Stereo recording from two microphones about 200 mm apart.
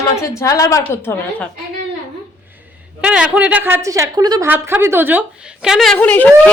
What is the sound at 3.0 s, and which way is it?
A woman's voice, 5° right (ahead or behind).